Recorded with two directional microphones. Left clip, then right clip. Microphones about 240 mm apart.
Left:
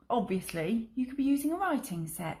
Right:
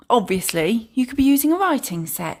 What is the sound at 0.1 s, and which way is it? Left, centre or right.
Speech, right.